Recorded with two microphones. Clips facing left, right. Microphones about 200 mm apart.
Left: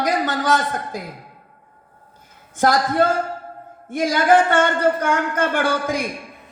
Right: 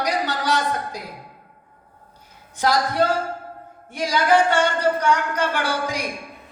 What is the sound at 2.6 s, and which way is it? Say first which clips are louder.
Speech: left 3 dB; 50° left (ahead or behind).